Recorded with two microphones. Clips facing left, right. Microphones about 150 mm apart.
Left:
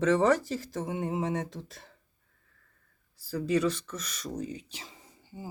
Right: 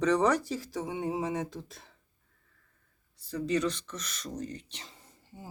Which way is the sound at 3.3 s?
5° left (ahead or behind).